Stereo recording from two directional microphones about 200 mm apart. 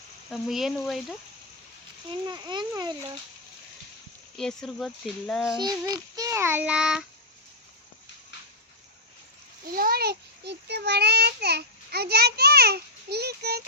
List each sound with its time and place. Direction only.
0.3 s speech: centre (ahead or behind)
2.0 s a child's voice: 20° right (ahead or behind)
4.4 s speech: centre (ahead or behind)
5.5 s child singing: 20° right (ahead or behind); by 7.0 s 5° right (ahead or behind)
9.6 s a child's voice: 45° right (ahead or behind)